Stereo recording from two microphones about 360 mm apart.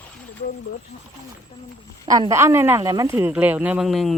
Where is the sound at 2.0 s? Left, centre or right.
Centre.